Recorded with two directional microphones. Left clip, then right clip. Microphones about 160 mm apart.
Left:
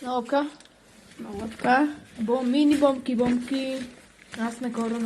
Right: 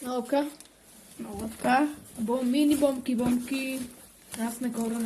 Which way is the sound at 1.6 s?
20° left (ahead or behind).